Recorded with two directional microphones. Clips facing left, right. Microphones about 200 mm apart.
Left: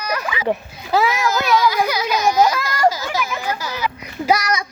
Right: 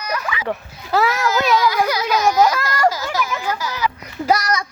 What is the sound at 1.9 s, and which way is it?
Children playing, 25° left (ahead or behind).